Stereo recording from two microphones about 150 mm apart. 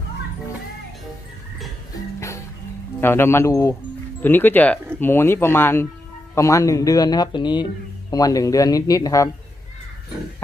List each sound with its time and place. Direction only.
3.0 s speech: 15° left (ahead or behind)